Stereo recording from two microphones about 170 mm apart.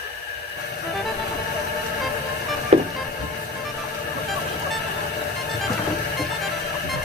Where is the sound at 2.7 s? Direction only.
40° right (ahead or behind).